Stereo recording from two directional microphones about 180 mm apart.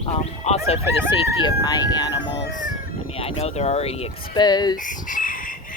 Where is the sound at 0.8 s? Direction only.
15° right (ahead or behind).